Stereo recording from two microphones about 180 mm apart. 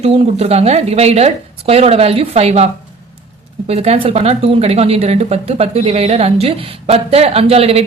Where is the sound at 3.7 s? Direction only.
35° right (ahead or behind).